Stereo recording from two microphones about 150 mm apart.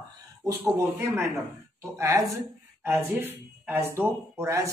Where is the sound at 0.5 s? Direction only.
15° right (ahead or behind).